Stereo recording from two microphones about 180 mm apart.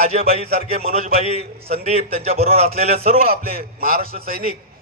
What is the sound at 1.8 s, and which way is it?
A man's voice, 35° right (ahead or behind).